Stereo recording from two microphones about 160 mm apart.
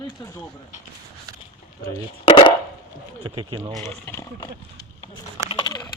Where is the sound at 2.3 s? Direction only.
35° left (ahead or behind).